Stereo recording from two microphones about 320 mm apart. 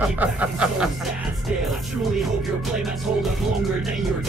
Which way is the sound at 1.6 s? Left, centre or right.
Centre.